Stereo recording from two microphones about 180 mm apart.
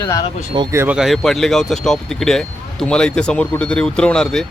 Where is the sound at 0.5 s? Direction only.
25° right (ahead or behind).